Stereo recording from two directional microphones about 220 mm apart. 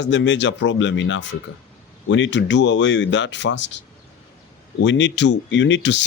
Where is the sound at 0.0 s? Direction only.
55° left (ahead or behind).